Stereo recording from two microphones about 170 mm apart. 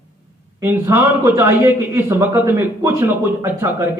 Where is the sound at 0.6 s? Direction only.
15° right (ahead or behind).